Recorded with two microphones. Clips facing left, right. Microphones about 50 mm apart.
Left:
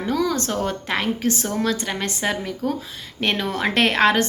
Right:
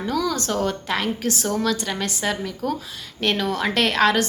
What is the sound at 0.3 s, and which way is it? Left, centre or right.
A woman's voice, left.